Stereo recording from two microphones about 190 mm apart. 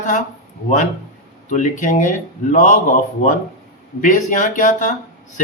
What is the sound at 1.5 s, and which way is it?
Speech, 40° left (ahead or behind).